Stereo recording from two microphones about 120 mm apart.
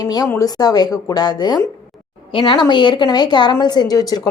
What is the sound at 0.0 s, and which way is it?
A woman's voice, 35° left (ahead or behind).